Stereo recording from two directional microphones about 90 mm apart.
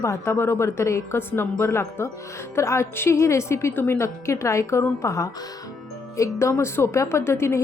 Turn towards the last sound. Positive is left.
turn(degrees=30)  # may be behind; listen again after turning